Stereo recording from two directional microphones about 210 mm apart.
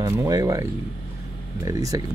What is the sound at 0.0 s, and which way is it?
Speech, 20° right (ahead or behind).